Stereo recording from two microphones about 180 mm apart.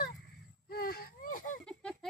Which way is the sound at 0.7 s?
55° left (ahead or behind).